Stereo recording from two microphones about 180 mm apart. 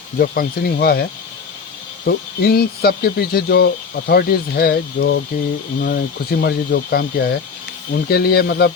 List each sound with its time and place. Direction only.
0.2 s speech: 55° left (ahead or behind)
2.0 s speech: 60° left (ahead or behind)
5.8 s speech: 60° left (ahead or behind)